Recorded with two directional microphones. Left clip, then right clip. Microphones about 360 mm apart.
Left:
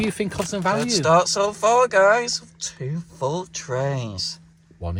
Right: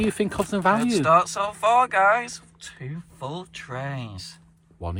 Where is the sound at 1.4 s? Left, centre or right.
Centre.